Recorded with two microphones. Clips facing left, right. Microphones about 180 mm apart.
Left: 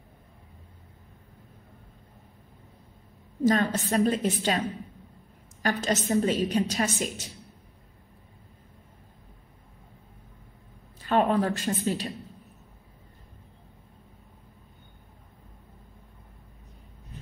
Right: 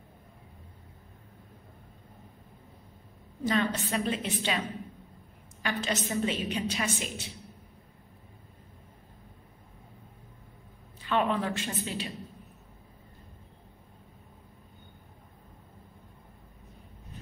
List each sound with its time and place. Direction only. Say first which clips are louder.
3.4 s a woman's voice: left 5 dB; 40° left (ahead or behind)
11.0 s speech: left 5 dB; 45° left (ahead or behind)